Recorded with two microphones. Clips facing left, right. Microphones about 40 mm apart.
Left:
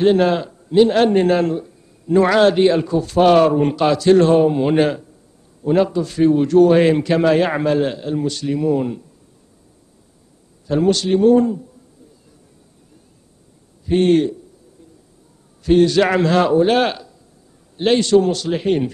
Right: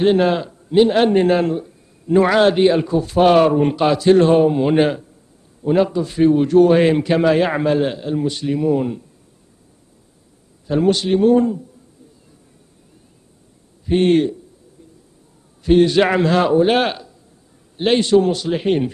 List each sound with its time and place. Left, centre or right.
0.0 s a man's voice: centre
0.7 s a man's voice: centre
4.7 s a man's voice: centre
7.2 s a man's voice: centre
10.9 s a man's voice: centre
13.9 s a man's voice: centre
15.6 s a man's voice: centre
16.2 s a man's voice: centre